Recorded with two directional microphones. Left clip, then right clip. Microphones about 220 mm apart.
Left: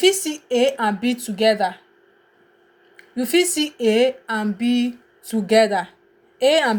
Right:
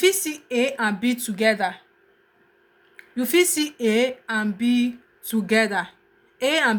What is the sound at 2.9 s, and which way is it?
Speech, 15° right (ahead or behind).